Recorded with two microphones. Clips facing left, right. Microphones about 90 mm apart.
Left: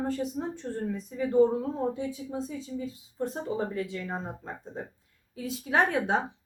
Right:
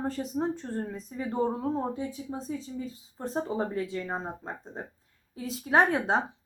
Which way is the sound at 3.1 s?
35° right (ahead or behind).